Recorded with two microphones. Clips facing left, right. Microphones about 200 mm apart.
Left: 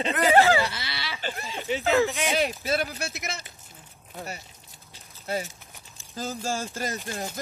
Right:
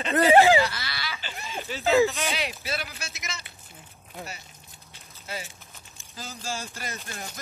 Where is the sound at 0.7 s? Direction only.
25° left (ahead or behind).